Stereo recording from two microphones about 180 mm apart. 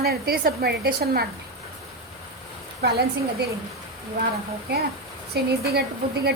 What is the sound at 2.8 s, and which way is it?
Speech, 65° right (ahead or behind).